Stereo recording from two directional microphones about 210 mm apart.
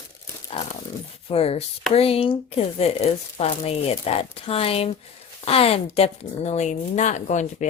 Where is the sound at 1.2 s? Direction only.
30° left (ahead or behind).